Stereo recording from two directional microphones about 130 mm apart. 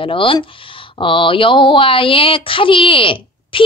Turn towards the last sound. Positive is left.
turn(degrees=40)  # may be behind; listen again after turning